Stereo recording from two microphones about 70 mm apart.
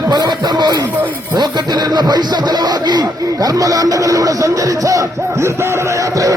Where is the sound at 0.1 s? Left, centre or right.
Right.